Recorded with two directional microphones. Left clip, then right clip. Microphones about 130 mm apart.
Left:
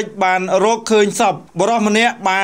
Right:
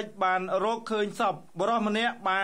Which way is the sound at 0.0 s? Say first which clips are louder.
Left 11 dB; 30° left (ahead or behind).